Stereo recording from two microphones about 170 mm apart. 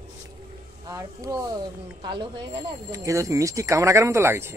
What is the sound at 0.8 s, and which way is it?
Speech, 20° right (ahead or behind).